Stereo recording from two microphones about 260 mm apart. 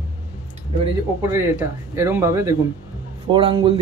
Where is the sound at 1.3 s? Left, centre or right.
Centre.